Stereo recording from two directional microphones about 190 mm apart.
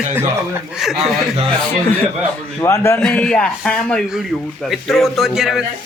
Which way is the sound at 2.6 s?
15° left (ahead or behind).